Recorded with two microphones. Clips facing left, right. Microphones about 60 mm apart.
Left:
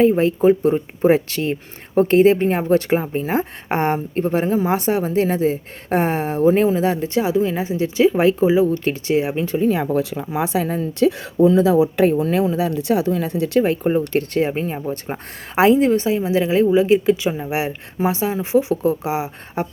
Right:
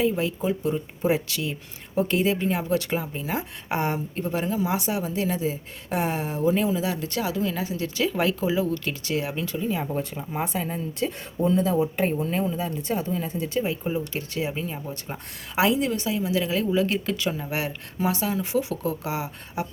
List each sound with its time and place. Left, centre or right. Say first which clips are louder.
0.0 s a woman's voice: left 10 dB; left
9.6 s a woman's voice: left 10 dB; left
16.8 s speech: left 10 dB; centre
19.6 s a woman's voice: left 6 dB; left